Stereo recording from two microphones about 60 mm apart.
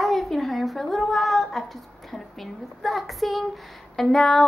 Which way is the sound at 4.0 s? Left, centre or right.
Centre.